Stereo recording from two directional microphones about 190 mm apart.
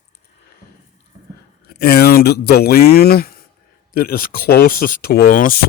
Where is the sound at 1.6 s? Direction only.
55° left (ahead or behind).